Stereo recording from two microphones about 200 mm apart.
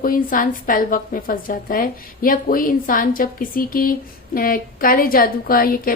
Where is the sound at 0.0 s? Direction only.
45° left (ahead or behind).